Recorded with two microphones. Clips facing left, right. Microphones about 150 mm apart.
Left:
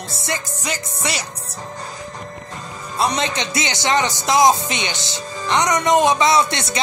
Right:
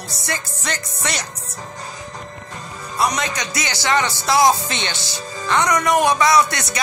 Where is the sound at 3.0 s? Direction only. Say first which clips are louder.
Left 1 dB; 25° left (ahead or behind).